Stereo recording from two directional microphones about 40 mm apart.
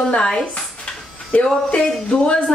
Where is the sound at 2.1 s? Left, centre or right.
Left.